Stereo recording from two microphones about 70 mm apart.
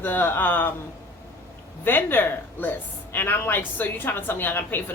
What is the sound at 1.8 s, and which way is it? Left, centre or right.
A woman's voice, left.